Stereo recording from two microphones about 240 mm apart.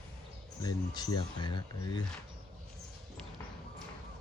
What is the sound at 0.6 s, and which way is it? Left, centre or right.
Speech, centre.